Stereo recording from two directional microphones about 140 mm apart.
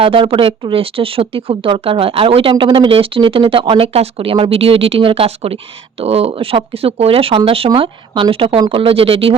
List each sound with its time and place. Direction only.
0.0 s speech: 40° right (ahead or behind)